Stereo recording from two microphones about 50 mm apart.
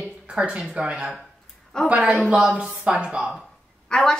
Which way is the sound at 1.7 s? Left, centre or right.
Centre.